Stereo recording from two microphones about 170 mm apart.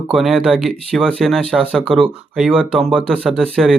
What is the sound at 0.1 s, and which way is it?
Speech, centre (ahead or behind).